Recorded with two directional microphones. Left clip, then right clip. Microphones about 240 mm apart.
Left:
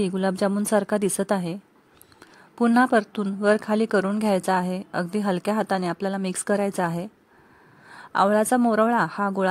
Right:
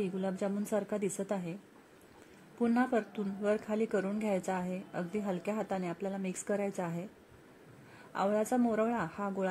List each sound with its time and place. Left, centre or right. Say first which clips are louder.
0.0 s a woman's voice: left 12 dB; left
2.6 s a woman's voice: left 12 dB; left
8.1 s a woman's voice: left 12 dB; left